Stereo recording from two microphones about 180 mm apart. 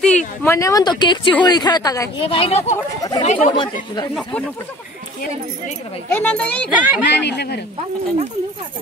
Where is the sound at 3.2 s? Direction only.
40° left (ahead or behind).